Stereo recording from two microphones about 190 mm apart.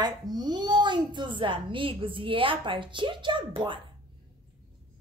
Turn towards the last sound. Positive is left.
turn(degrees=-25)  # may be behind; listen again after turning